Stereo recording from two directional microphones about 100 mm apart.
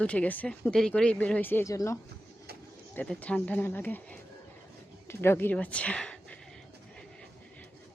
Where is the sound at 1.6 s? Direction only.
30° left (ahead or behind).